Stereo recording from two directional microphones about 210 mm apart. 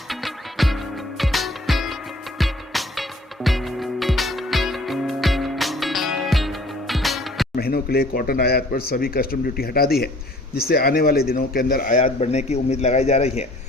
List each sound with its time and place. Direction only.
0.1 s music: centre (ahead or behind)
7.5 s a man's voice: 45° left (ahead or behind); by 13.5 s 30° left (ahead or behind)